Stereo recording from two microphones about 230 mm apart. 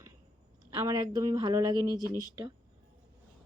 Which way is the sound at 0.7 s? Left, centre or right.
Centre.